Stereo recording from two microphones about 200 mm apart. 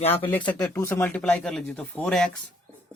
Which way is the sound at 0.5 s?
10° left (ahead or behind).